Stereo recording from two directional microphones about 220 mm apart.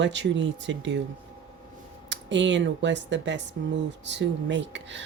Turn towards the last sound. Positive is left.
turn(degrees=-55)  # may be behind; listen again after turning